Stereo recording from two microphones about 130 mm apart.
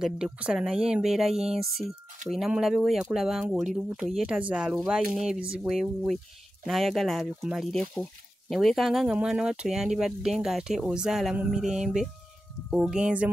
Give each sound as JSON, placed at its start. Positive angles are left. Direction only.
{"t": 0.0, "sound": "speech", "side_deg": -5}